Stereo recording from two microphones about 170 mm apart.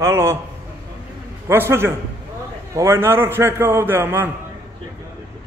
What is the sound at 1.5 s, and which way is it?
A man's voice, 15° right (ahead or behind).